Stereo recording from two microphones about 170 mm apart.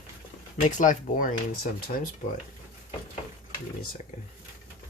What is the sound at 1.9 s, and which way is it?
Speech, 60° left (ahead or behind).